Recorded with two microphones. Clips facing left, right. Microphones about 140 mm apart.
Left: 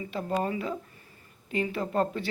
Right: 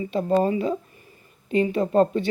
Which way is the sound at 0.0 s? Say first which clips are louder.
Right 8 dB; 25° right (ahead or behind).